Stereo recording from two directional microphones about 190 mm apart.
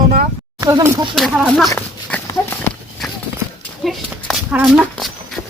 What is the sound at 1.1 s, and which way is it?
Speech, centre (ahead or behind).